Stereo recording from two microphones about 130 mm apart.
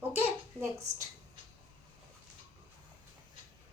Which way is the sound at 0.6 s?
20° right (ahead or behind).